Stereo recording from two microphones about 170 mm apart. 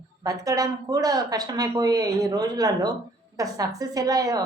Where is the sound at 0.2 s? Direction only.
20° right (ahead or behind).